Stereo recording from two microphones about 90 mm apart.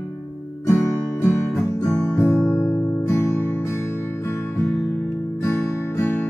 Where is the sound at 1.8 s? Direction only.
15° left (ahead or behind).